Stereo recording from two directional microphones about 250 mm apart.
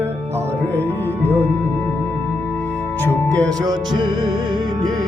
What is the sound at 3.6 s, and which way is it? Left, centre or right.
Music, centre.